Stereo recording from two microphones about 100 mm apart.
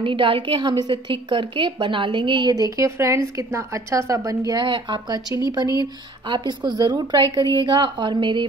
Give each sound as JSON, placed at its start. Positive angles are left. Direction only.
{"t": 0.0, "sound": "a woman's voice", "side_deg": -55}
{"t": 2.5, "sound": "a woman's voice", "side_deg": -35}
{"t": 4.6, "sound": "a woman's voice", "side_deg": -50}